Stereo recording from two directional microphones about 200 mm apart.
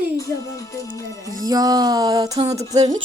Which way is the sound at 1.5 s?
20° right (ahead or behind).